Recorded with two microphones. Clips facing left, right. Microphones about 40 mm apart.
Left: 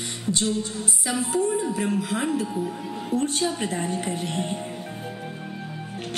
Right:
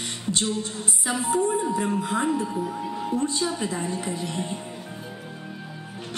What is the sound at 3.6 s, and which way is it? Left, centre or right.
Speech, left.